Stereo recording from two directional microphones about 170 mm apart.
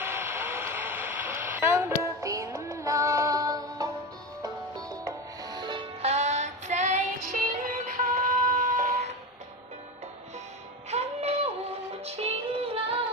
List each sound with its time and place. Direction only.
0.0 s radio: 15° right (ahead or behind)
4.4 s music: 25° right (ahead or behind); by 9.1 s 50° right (ahead or behind)
10.9 s music: 40° right (ahead or behind)